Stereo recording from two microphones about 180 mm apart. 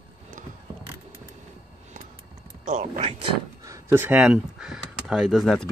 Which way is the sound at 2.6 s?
45° right (ahead or behind).